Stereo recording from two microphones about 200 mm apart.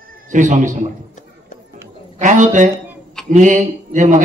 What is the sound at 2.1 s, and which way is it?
A man's voice, 40° right (ahead or behind).